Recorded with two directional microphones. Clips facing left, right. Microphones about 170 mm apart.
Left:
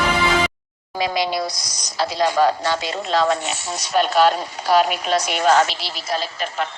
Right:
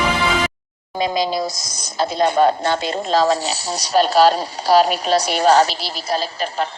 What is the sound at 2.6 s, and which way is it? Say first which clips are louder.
Speech: right 3 dB; 45° right (ahead or behind).